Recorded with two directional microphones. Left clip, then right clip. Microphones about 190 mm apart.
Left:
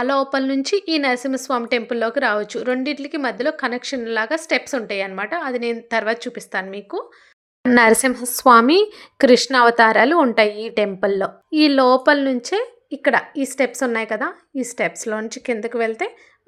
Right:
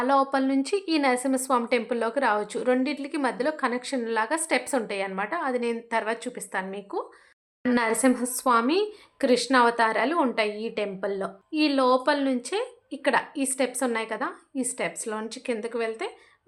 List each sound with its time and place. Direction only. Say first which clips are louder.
0.0 s a woman's voice: left 3 dB; 15° left (ahead or behind)
7.8 s a woman's voice: left 10 dB; 40° left (ahead or behind); by 16.1 s 25° left (ahead or behind)